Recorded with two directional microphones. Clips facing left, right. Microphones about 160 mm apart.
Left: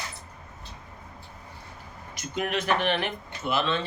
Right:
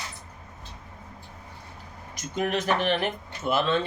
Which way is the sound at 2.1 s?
40° right (ahead or behind).